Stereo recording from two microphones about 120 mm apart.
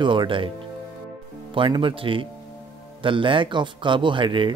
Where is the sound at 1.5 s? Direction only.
45° right (ahead or behind).